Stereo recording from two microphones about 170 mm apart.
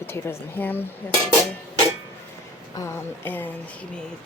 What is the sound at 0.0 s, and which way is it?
Speech, 10° left (ahead or behind).